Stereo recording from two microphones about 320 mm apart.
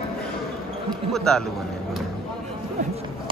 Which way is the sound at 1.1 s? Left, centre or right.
Centre.